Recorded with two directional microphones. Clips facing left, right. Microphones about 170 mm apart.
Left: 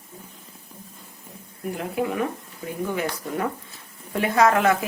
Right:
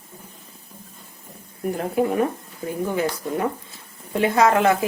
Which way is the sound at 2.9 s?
25° right (ahead or behind).